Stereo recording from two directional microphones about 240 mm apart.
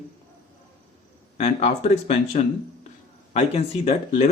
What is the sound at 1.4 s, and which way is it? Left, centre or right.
Speech, left.